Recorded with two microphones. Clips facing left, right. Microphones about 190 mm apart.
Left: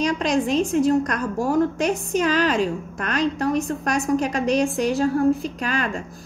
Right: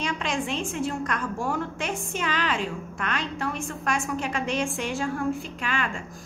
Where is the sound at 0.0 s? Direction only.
40° left (ahead or behind).